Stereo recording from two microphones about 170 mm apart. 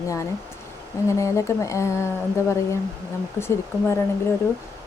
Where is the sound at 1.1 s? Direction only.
15° left (ahead or behind).